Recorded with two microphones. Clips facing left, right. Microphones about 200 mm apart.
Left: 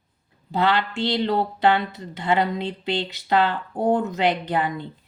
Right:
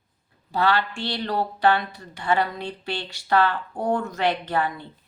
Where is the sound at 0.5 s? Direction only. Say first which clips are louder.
Left 1 dB; 20° left (ahead or behind).